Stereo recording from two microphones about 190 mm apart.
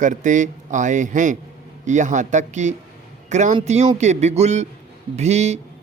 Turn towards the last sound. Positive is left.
turn(degrees=-35)  # may be behind; listen again after turning